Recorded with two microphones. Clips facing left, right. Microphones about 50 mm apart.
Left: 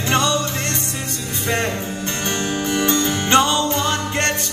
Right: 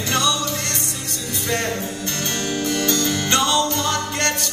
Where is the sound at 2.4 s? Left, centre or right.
Left.